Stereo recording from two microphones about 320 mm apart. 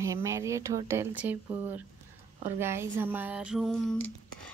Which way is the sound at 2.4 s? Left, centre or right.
Centre.